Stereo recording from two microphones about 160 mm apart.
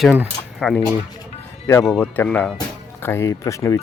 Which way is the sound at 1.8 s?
5° left (ahead or behind).